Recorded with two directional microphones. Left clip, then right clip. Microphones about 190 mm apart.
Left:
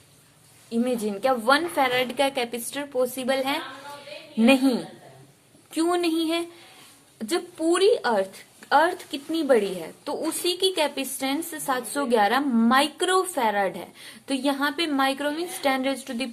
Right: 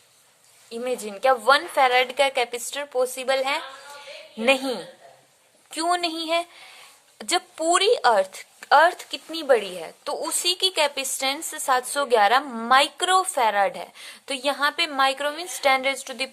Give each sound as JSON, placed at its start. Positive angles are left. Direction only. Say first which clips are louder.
{"t": 0.7, "sound": "speech", "louder": "left 2 dB", "side_deg": -25}